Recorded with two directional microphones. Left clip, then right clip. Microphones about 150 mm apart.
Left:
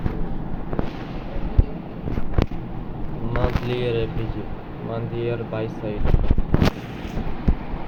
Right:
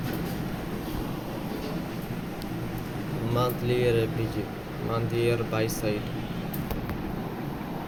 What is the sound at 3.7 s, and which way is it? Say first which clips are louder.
Speech: right 1 dB; 15° right (ahead or behind).